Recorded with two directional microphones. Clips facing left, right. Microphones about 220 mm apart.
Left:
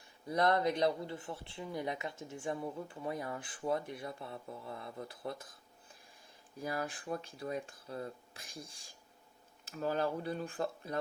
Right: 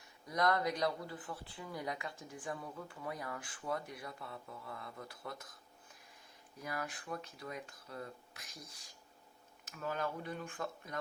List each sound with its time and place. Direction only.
0.3 s speech: 30° left (ahead or behind)
6.6 s speech: 30° left (ahead or behind)